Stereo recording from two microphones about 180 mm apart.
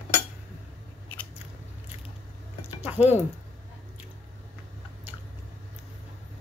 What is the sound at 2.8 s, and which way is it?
Speech, 10° right (ahead or behind).